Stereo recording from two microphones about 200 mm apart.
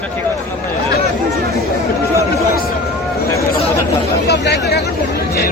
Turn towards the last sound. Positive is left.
turn(degrees=55)  # may be behind; listen again after turning